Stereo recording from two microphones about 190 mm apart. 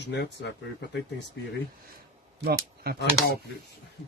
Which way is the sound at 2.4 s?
55° right (ahead or behind).